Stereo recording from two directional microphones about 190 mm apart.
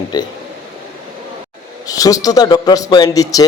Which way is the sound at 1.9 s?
20° left (ahead or behind).